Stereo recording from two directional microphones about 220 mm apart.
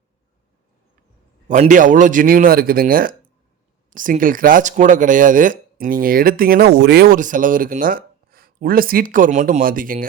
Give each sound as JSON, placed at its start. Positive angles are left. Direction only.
{"t": 1.5, "sound": "speech", "side_deg": -35}